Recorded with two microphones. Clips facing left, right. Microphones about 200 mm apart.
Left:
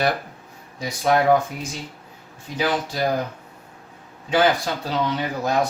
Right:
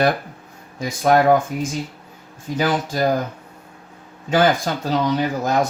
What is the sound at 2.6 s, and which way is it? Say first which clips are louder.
Speech: right 3 dB; 45° right (ahead or behind).